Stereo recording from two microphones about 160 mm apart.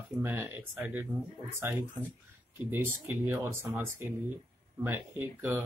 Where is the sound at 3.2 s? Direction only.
15° right (ahead or behind).